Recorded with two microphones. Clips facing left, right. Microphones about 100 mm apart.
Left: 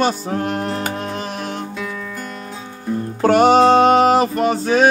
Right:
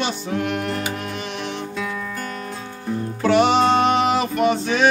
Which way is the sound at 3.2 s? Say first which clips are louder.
Left 5 dB; 45° left (ahead or behind).